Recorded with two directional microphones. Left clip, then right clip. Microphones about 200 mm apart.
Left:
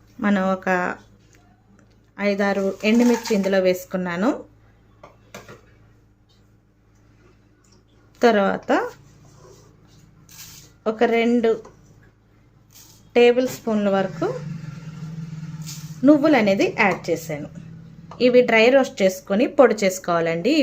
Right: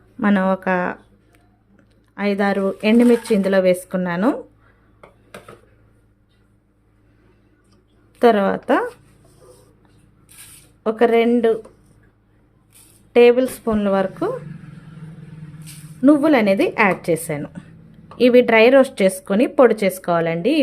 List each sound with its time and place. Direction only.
0.2 s speech: 20° right (ahead or behind)
8.2 s speech: 15° right (ahead or behind)
10.8 s speech: 15° right (ahead or behind)
13.1 s speech: 15° right (ahead or behind)
16.0 s speech: 15° right (ahead or behind)